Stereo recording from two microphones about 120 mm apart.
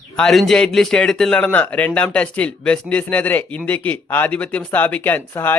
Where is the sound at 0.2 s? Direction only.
Centre (ahead or behind).